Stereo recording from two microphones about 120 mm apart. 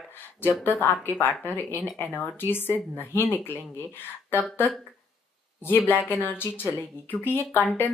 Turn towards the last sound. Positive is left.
turn(degrees=15)  # may be behind; listen again after turning